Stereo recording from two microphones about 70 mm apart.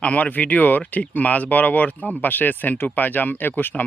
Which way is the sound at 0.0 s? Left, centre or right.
Left.